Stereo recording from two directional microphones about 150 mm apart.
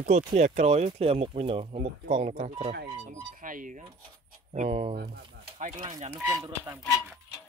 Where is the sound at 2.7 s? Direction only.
85° right.